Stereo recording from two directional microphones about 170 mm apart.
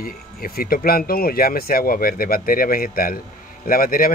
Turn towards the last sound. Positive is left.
turn(degrees=55)  # may be behind; listen again after turning